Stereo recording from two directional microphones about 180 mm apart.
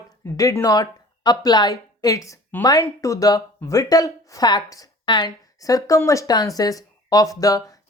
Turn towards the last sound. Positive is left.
turn(degrees=20)  # may be behind; listen again after turning